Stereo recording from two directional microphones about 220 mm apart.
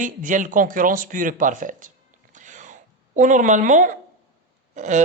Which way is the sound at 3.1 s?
35° right (ahead or behind).